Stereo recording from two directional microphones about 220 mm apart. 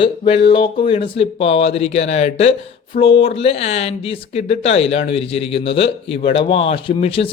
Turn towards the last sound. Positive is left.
turn(degrees=25)  # may be behind; listen again after turning